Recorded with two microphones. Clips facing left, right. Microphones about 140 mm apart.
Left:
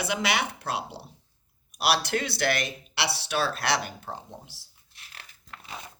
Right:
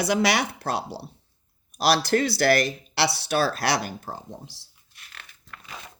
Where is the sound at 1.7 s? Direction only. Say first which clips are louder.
Right 5 dB; 35° right (ahead or behind).